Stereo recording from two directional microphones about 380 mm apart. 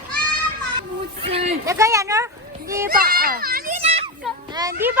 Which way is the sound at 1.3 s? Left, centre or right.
Centre.